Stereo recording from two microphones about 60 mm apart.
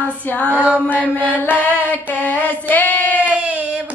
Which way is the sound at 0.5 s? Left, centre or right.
Right.